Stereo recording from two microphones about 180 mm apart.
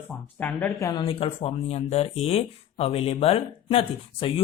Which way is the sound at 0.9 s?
30° left (ahead or behind).